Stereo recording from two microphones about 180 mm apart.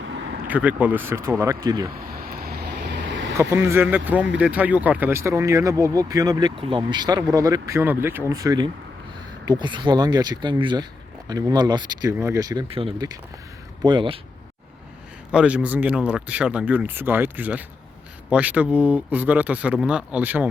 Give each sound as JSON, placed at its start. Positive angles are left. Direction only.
{"t": 0.4, "sound": "speech", "side_deg": -10}
{"t": 2.3, "sound": "vehicle", "side_deg": -60}
{"t": 3.3, "sound": "speech", "side_deg": -15}
{"t": 15.3, "sound": "speech", "side_deg": -5}